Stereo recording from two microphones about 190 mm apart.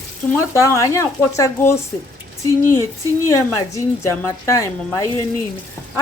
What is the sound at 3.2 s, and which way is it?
A woman's voice, 15° left (ahead or behind).